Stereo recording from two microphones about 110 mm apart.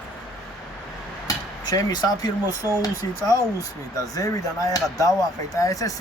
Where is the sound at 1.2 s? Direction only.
35° left (ahead or behind).